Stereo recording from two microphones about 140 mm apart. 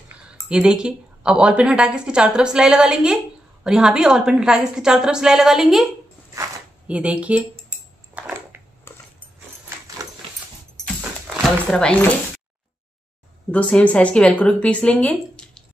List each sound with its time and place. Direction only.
0.5 s a woman's voice: 5° right (ahead or behind)
6.9 s a woman's voice: 10° right (ahead or behind)
8.1 s a sound: 15° right (ahead or behind)
8.9 s a sound: 15° left (ahead or behind)
11.7 s a woman's voice: 10° left (ahead or behind)
13.5 s a woman's voice: 10° left (ahead or behind)